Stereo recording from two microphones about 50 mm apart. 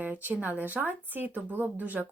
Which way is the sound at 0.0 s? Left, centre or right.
Right.